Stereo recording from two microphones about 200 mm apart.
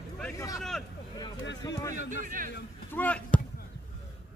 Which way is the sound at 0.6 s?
Centre (ahead or behind).